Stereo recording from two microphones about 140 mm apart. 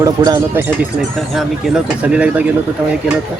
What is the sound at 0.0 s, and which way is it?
Speech, 25° right (ahead or behind).